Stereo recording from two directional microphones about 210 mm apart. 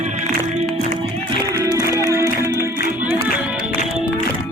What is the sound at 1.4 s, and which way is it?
Music, 15° right (ahead or behind).